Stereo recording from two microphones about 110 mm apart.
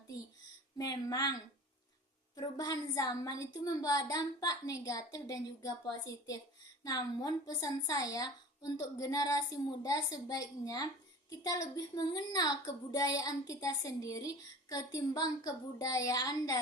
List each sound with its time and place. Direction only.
0.8 s a woman's voice: 35° left (ahead or behind)